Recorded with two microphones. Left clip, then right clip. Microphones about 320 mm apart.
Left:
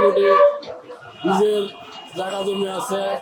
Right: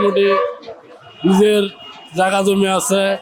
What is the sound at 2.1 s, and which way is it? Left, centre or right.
Speech, right.